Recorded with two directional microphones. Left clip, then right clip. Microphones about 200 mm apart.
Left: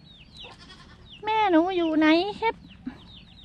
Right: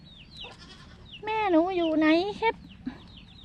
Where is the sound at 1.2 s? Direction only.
15° left (ahead or behind).